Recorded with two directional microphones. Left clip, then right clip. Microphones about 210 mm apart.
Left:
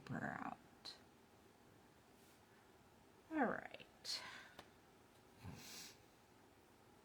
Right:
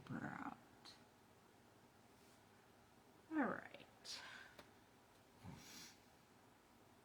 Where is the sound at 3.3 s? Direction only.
55° left (ahead or behind).